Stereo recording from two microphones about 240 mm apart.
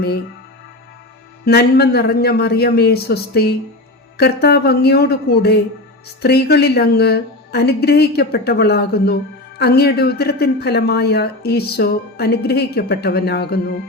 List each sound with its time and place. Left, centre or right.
1.5 s a woman's voice: left